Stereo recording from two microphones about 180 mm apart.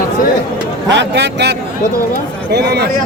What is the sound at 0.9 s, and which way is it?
Speech, 80° right.